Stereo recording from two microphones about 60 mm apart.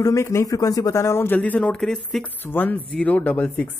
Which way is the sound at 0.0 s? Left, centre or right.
Left.